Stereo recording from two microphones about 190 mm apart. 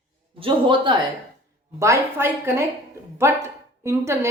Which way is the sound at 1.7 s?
15° right (ahead or behind).